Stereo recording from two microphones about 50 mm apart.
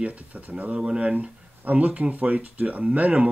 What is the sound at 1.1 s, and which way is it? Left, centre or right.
Speech, right.